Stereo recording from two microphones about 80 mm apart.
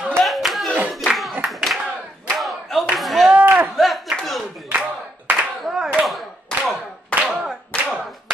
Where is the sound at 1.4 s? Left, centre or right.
Centre.